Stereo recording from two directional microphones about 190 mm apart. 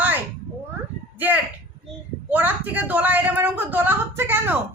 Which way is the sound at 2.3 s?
10° right (ahead or behind).